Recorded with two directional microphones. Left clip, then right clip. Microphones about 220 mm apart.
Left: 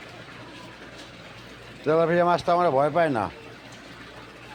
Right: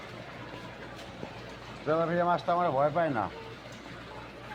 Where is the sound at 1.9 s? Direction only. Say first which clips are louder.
Left 7 dB; 60° left (ahead or behind).